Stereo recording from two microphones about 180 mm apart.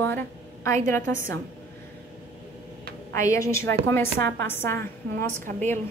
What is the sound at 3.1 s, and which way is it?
Speech, 15° left (ahead or behind).